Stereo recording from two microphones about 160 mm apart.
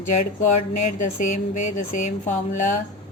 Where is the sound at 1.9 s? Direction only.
50° left (ahead or behind).